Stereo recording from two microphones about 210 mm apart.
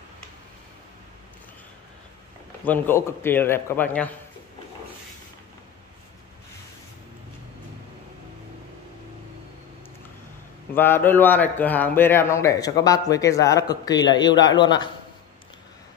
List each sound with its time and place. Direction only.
2.6 s a man's voice: 10° left (ahead or behind)
10.7 s a man's voice: 10° left (ahead or behind)